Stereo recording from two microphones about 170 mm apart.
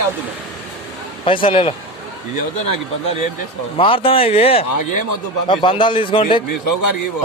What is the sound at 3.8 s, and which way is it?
A man's voice, 30° left (ahead or behind).